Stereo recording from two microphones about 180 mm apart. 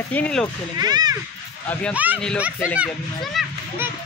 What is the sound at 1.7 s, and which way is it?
Speech, 10° left (ahead or behind).